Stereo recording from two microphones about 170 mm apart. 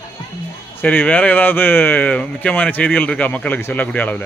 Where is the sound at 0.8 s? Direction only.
10° left (ahead or behind).